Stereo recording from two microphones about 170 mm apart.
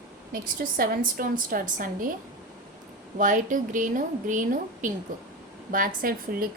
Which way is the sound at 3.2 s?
50° right (ahead or behind).